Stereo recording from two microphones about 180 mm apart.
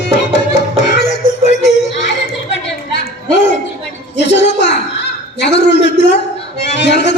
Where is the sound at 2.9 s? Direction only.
75° left (ahead or behind).